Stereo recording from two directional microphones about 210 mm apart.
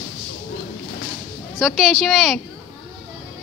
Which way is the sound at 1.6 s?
Centre (ahead or behind).